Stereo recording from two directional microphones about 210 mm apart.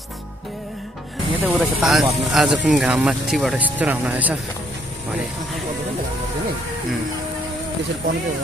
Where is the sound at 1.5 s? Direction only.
5° right (ahead or behind).